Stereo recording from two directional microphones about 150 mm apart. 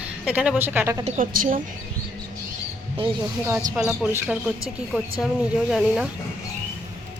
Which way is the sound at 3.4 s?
10° right (ahead or behind).